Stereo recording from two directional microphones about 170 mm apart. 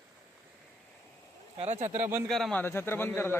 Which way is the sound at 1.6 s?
40° right (ahead or behind).